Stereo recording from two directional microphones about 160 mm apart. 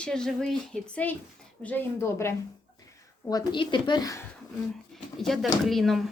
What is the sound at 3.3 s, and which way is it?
Speech, 25° left (ahead or behind).